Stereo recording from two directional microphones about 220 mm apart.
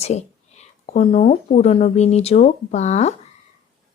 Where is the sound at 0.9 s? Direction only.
25° left (ahead or behind).